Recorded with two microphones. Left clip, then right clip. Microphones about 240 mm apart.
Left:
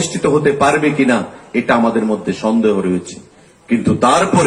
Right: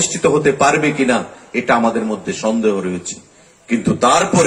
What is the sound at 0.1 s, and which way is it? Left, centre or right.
A man's voice, right.